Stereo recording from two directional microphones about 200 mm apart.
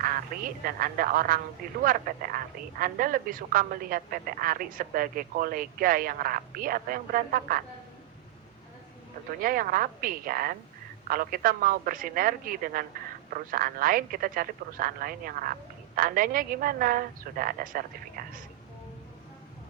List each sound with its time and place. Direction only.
0.0 s speech: 45° right (ahead or behind)
9.4 s speech: 45° right (ahead or behind)